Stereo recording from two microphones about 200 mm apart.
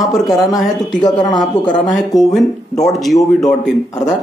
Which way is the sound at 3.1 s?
Centre (ahead or behind).